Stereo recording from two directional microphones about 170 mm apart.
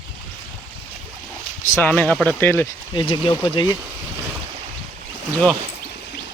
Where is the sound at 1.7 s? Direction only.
10° left (ahead or behind).